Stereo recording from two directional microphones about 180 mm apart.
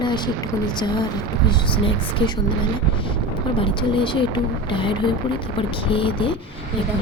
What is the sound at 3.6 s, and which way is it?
A woman's voice, 25° left (ahead or behind).